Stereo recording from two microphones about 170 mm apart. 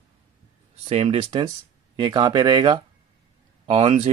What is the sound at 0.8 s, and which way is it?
Speech, 35° right (ahead or behind).